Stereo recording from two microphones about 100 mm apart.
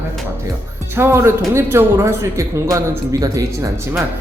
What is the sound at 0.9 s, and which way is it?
A man's voice, 25° right (ahead or behind).